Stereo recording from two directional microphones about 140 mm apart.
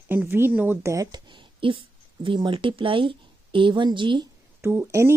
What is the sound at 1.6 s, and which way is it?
A woman's voice, 35° right (ahead or behind).